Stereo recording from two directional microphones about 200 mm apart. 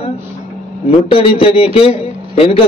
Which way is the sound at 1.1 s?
30° left (ahead or behind).